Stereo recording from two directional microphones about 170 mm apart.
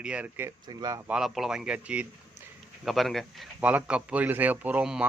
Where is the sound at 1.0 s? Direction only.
5° right (ahead or behind).